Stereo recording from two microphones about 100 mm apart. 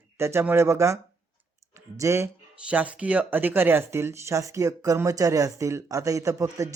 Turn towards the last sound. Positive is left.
turn(degrees=-30)  # may be behind; listen again after turning